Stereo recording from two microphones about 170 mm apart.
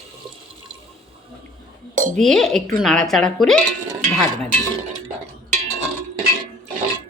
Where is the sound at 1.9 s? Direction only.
50° right (ahead or behind).